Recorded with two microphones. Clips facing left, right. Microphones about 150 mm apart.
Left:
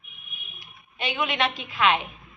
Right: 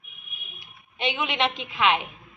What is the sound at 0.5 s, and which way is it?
A woman's voice, 25° right (ahead or behind).